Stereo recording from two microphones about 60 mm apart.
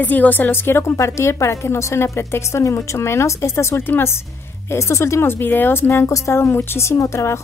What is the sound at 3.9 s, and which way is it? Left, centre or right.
Speech, left.